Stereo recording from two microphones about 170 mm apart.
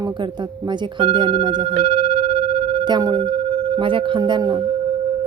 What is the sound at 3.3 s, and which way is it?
A woman's voice, 40° right (ahead or behind).